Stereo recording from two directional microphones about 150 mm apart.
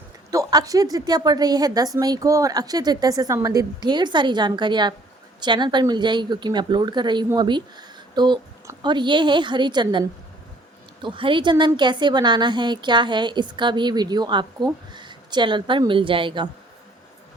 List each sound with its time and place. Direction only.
0.3 s a woman's voice: 20° right (ahead or behind)